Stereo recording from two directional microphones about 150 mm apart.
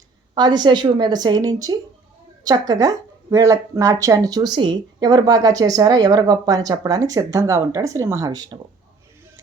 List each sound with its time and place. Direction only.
0.3 s speech: 30° right (ahead or behind)